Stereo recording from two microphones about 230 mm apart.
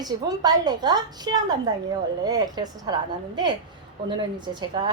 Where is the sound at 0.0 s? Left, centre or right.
Centre.